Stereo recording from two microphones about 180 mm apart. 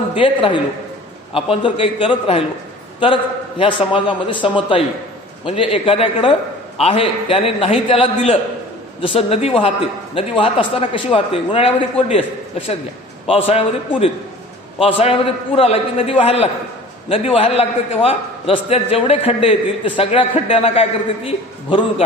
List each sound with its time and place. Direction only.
0.1 s a woman's voice: 30° left (ahead or behind)
3.6 s a man's voice: 25° left (ahead or behind)